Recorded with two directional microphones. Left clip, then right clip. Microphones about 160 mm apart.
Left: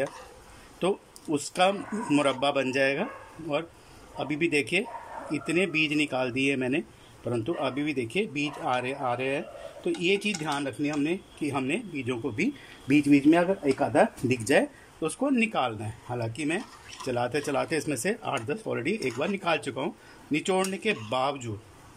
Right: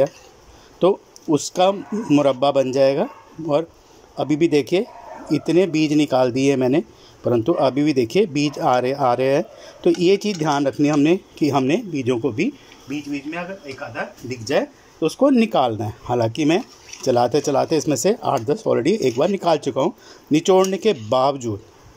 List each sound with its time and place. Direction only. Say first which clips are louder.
0.7 s speech: right 11 dB; 25° right (ahead or behind)
12.8 s speech: left 7 dB; 25° left (ahead or behind)
14.5 s speech: right 5 dB; centre (ahead or behind)
15.1 s speech: right 10 dB; 35° right (ahead or behind)